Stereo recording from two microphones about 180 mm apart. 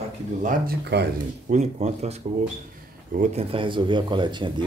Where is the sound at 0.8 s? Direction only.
70° right (ahead or behind).